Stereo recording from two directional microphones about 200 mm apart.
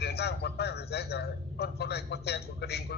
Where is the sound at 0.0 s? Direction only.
55° left (ahead or behind).